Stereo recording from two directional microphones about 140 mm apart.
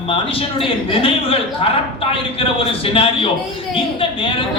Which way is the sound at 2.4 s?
40° left (ahead or behind).